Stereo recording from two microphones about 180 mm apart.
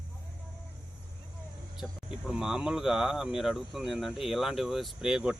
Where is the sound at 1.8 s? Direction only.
5° right (ahead or behind).